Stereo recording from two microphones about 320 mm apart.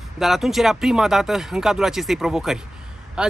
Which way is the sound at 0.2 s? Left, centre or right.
Centre.